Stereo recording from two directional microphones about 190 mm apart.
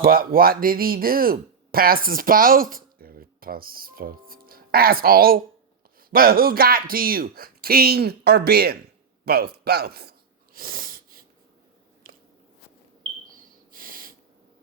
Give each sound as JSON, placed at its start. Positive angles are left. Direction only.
{"t": 0.0, "sound": "speech", "side_deg": -50}
{"t": 9.2, "sound": "a sound", "side_deg": -55}
{"t": 13.7, "sound": "snort", "side_deg": -50}